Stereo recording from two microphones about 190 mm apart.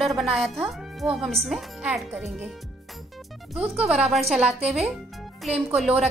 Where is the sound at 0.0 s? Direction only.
Centre (ahead or behind).